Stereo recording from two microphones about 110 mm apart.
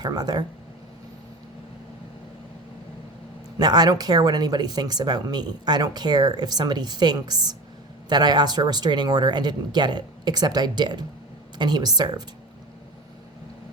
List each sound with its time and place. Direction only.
0.0 s speech: 40° right (ahead or behind)
3.6 s speech: 40° right (ahead or behind)